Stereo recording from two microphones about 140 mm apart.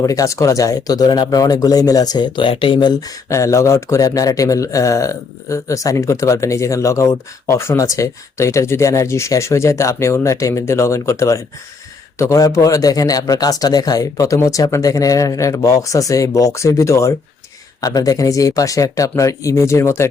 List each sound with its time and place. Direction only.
0.0 s speech: 25° left (ahead or behind)